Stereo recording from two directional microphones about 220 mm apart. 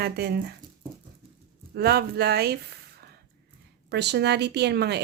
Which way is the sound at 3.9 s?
50° right (ahead or behind).